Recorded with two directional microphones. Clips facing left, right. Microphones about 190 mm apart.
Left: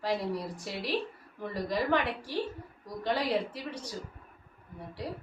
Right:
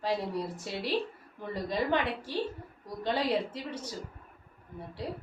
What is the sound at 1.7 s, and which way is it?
A woman's voice, 20° right (ahead or behind).